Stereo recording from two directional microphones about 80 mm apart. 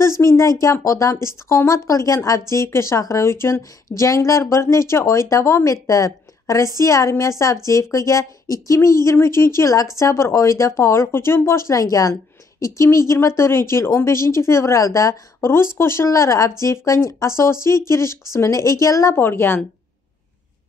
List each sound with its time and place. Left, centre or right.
0.2 s a woman's voice: left
19.1 s a woman's voice: left